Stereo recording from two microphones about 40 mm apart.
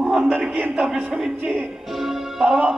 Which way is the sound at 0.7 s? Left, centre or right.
Centre.